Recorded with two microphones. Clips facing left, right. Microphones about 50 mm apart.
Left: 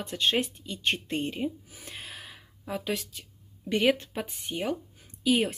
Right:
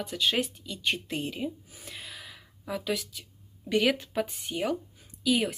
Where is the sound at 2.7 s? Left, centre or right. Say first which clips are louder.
Even; centre.